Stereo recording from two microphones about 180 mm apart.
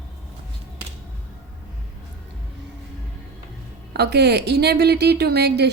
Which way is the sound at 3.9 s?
65° right (ahead or behind).